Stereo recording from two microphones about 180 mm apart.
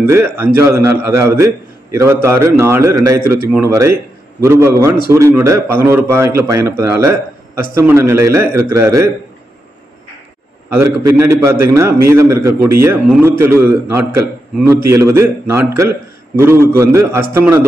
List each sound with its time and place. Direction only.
0.0 s a man's voice: 15° right (ahead or behind)
10.7 s a man's voice: 15° right (ahead or behind)